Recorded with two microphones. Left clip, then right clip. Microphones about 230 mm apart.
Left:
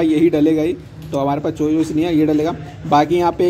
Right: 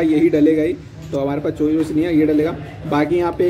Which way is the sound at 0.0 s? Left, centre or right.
Left.